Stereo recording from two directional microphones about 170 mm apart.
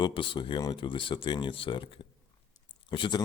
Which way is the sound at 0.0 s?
30° left (ahead or behind).